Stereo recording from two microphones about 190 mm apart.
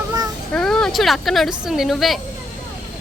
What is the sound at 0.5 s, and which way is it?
A woman's voice, 5° left (ahead or behind).